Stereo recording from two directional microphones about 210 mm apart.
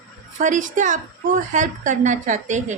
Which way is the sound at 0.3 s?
35° right (ahead or behind).